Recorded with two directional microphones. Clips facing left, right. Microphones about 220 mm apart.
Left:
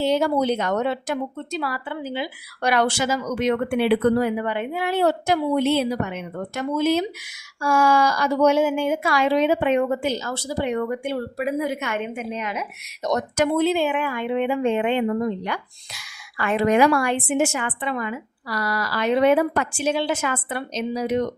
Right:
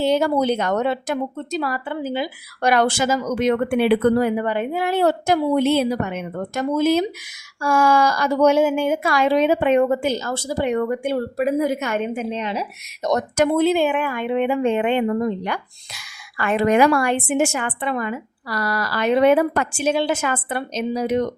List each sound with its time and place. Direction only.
0.0 s speech: 50° right (ahead or behind); by 12.6 s 30° right (ahead or behind)
13.0 s speech: 50° right (ahead or behind)
16.4 s speech: 55° right (ahead or behind)